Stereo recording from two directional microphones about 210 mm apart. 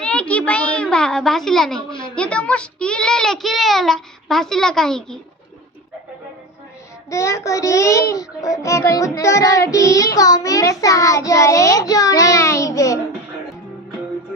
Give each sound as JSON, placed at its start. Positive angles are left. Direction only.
{"t": 0.0, "sound": "a sound", "side_deg": 5}
{"t": 2.1, "sound": "a child's voice", "side_deg": 5}
{"t": 7.1, "sound": "child singing", "side_deg": 15}